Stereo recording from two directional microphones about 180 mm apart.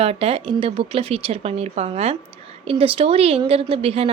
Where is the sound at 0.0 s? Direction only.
35° right (ahead or behind).